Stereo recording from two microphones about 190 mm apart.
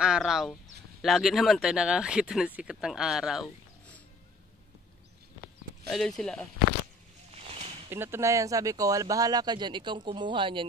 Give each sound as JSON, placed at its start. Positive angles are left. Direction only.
{"t": 0.0, "sound": "speech", "side_deg": -5}
{"t": 5.9, "sound": "speech", "side_deg": 0}
{"t": 7.9, "sound": "speech", "side_deg": -10}